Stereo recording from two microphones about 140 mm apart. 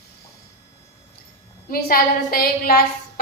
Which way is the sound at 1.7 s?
90° left.